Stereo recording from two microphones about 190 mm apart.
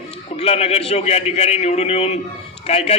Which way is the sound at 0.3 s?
30° left (ahead or behind).